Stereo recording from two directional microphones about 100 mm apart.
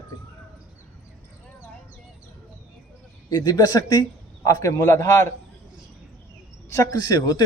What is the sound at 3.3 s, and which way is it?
A man's voice, 45° left (ahead or behind).